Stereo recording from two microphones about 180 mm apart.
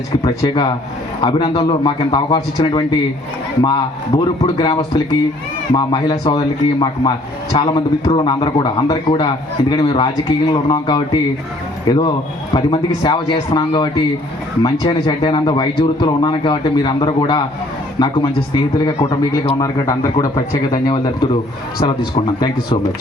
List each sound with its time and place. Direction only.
0.3 s a man's voice: 20° left (ahead or behind)